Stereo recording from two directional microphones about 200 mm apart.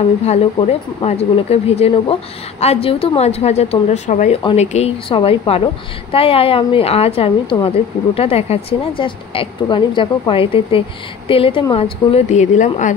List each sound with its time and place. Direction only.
0.2 s a woman's voice: 30° left (ahead or behind)